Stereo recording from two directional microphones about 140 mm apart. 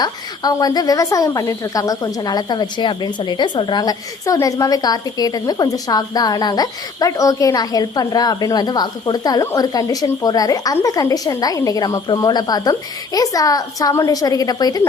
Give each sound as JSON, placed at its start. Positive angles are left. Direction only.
{"t": 0.0, "sound": "speech", "side_deg": 30}